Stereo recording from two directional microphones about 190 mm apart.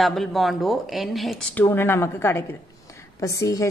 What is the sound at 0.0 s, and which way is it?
Speech, centre (ahead or behind).